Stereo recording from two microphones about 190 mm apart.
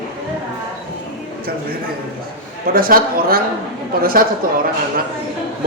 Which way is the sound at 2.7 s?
50° right (ahead or behind).